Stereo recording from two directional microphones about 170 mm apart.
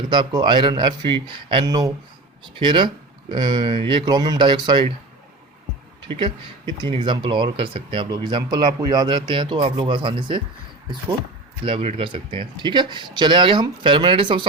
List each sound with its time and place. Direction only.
0.1 s speech: 25° right (ahead or behind)
6.1 s speech: 25° right (ahead or behind)
11.6 s speech: 35° right (ahead or behind)